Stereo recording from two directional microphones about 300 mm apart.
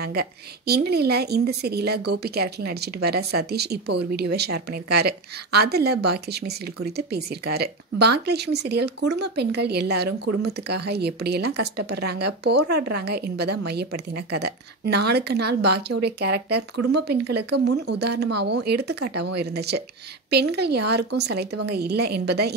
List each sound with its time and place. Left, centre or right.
0.0 s a woman's voice: right